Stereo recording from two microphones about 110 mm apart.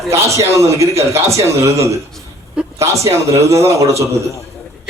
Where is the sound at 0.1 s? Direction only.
25° right (ahead or behind).